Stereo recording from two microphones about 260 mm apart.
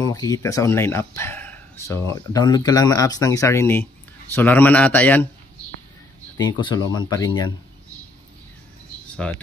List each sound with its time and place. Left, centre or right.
0.0 s speech: centre
6.3 s speech: centre
9.1 s speech: centre